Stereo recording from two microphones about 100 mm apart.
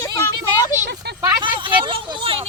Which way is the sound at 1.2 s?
35° right (ahead or behind).